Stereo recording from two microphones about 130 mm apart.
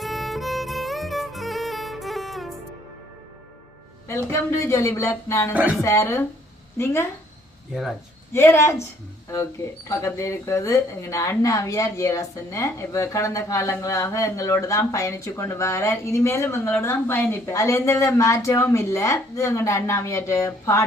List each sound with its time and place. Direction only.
0.0 s music: centre (ahead or behind)
4.1 s speech: 20° left (ahead or behind)
7.7 s speech: centre (ahead or behind)
8.3 s speech: 20° left (ahead or behind)
10.2 s speech: 25° left (ahead or behind)